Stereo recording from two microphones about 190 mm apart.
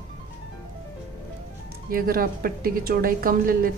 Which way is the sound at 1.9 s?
50° right (ahead or behind).